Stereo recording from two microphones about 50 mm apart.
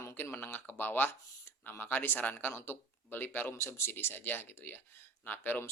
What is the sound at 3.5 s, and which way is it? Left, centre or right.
Speech, left.